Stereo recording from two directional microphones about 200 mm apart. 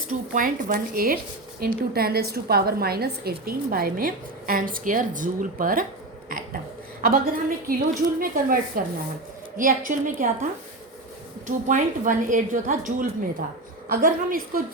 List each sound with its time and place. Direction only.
0.1 s a woman's voice: 40° right (ahead or behind)
7.0 s a woman's voice: 45° right (ahead or behind)
11.4 s a woman's voice: 40° right (ahead or behind)